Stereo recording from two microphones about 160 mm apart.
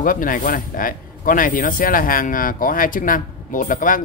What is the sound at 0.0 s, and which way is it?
Speech, 60° left (ahead or behind).